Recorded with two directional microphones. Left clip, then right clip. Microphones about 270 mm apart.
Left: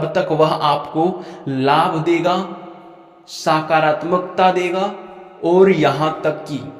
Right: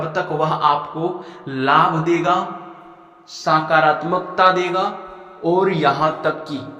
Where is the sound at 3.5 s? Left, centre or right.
Left.